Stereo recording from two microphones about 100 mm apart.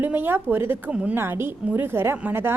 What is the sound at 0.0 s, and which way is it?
A woman's voice, 20° right (ahead or behind).